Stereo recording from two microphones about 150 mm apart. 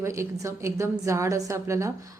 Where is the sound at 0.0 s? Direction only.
20° right (ahead or behind).